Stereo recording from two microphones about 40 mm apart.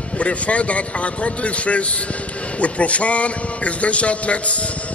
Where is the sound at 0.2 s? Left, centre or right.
Left.